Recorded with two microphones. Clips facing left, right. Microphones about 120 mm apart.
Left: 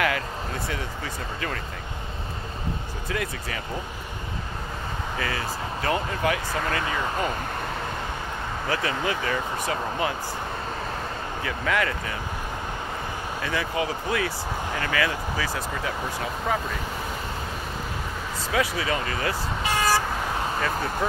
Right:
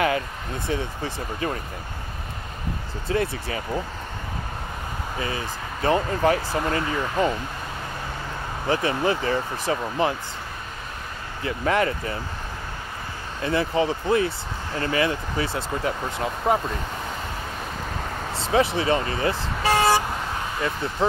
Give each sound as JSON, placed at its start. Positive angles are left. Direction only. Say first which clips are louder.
{"t": 0.7, "sound": "speech", "louder": "right 4 dB", "side_deg": -25}
{"t": 3.1, "sound": "speech", "louder": "right 6 dB", "side_deg": -30}
{"t": 5.2, "sound": "speech", "louder": "even", "side_deg": -25}
{"t": 8.6, "sound": "speech", "louder": "right 5 dB", "side_deg": -25}
{"t": 11.4, "sound": "speech", "louder": "right 4 dB", "side_deg": -30}
{"t": 13.4, "sound": "speech", "louder": "right 6 dB", "side_deg": -30}
{"t": 18.4, "sound": "speech", "louder": "right 5 dB", "side_deg": -25}
{"t": 21.0, "sound": "speech", "louder": "right 6 dB", "side_deg": -25}